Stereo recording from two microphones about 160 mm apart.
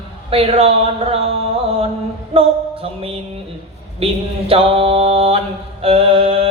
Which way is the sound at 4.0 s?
35° right (ahead or behind).